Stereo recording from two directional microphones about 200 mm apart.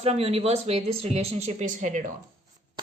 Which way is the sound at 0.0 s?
30° right (ahead or behind).